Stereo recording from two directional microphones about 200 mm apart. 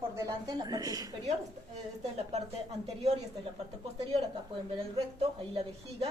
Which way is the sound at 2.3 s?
30° right (ahead or behind).